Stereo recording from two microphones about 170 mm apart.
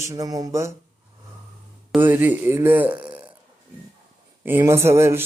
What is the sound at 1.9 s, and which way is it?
Speech, 10° right (ahead or behind).